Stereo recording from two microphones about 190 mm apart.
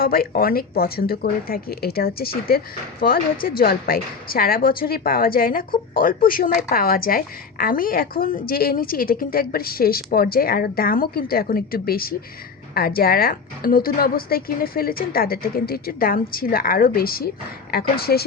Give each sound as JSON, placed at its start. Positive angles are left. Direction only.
{"t": 0.0, "sound": "a woman's voice", "side_deg": 50}